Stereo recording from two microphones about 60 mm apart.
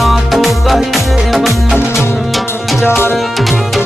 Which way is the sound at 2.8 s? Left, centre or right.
Left.